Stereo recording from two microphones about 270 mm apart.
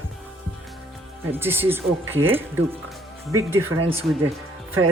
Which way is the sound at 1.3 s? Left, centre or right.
Centre.